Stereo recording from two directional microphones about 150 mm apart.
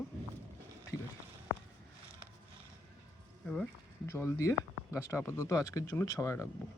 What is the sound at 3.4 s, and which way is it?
Speech, 5° left (ahead or behind).